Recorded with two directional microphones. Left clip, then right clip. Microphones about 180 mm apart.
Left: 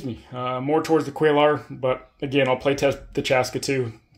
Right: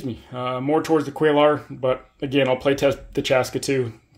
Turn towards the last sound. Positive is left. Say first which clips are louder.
# right 2 dB
turn(degrees=-5)  # may be behind; listen again after turning